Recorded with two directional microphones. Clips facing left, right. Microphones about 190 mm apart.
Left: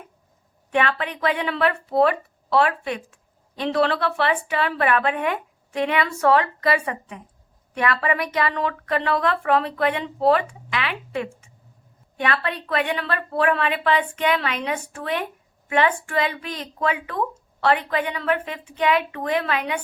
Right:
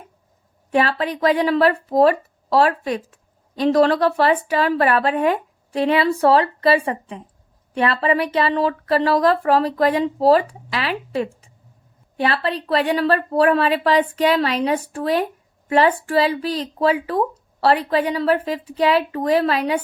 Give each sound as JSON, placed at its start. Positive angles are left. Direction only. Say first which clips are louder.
{"t": 0.7, "sound": "a woman's voice", "louder": "right 4 dB", "side_deg": -35}